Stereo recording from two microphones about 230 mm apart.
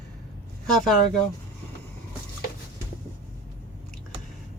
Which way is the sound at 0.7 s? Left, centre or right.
Centre.